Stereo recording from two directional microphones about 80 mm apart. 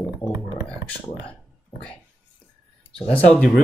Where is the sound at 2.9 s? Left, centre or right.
Centre.